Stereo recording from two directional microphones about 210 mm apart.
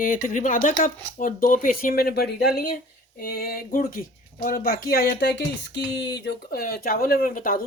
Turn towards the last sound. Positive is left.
turn(degrees=40)  # may be behind; listen again after turning